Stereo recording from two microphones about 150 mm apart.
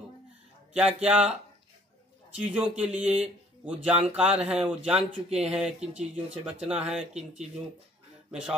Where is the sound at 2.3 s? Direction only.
5° right (ahead or behind).